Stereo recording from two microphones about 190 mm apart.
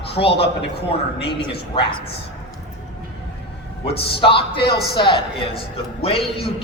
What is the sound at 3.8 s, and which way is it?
Speech, 25° left (ahead or behind).